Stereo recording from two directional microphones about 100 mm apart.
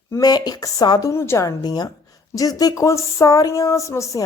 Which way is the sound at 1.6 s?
40° left (ahead or behind).